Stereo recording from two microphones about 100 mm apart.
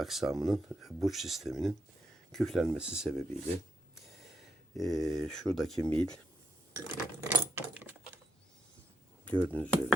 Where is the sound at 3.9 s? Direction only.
Centre (ahead or behind).